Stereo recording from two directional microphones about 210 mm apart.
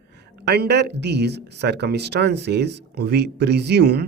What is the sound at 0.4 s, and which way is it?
A man's voice, 50° right (ahead or behind).